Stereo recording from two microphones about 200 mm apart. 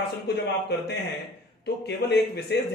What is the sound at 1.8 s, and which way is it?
Speech, 55° left (ahead or behind).